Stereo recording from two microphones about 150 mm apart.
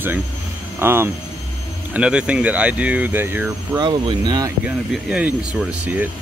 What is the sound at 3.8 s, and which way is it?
Speech, 30° right (ahead or behind).